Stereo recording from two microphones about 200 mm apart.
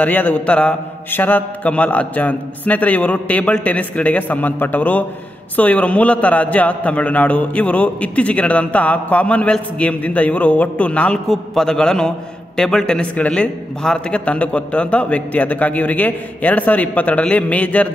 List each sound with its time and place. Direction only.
0.0 s a man's voice: 5° left (ahead or behind)